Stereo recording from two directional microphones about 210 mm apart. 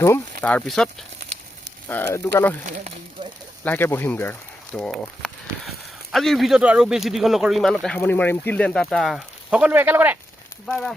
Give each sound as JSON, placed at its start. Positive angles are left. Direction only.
{"t": 0.4, "sound": "speech", "side_deg": 5}
{"t": 1.9, "sound": "speech", "side_deg": 10}
{"t": 2.6, "sound": "speech", "side_deg": -35}
{"t": 3.6, "sound": "speech", "side_deg": 10}
{"t": 10.7, "sound": "speech", "side_deg": 0}